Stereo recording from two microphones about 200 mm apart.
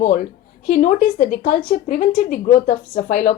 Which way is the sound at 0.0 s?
35° left (ahead or behind).